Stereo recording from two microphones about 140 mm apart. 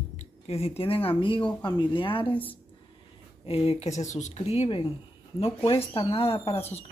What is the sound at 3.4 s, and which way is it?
Speech, 45° left (ahead or behind).